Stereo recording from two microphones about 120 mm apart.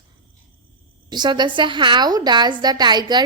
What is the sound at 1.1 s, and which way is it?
A woman's voice, 40° right (ahead or behind).